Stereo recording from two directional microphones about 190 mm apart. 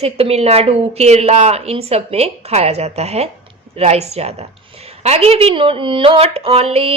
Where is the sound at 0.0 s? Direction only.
35° right (ahead or behind).